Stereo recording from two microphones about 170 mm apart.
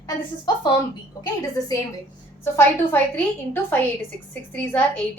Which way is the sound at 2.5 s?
10° left (ahead or behind).